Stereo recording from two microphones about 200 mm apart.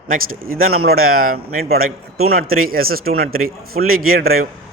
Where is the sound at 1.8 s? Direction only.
90° right.